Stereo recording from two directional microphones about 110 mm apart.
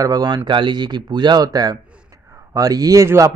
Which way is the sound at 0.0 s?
35° right (ahead or behind).